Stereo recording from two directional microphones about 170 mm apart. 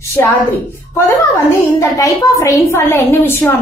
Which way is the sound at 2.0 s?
20° left (ahead or behind).